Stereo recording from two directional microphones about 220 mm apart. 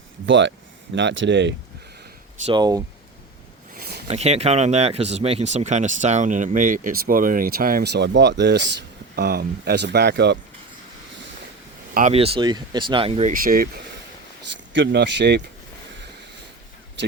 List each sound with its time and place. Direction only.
0.3 s speech: 55° right (ahead or behind)
2.4 s speech: 20° right (ahead or behind)
3.8 s a sound: 45° right (ahead or behind)
4.1 s speech: 30° right (ahead or behind); by 10.3 s 50° right (ahead or behind)
11.9 s speech: 30° right (ahead or behind)
14.7 s speech: 55° right (ahead or behind)
17.0 s speech: 55° right (ahead or behind)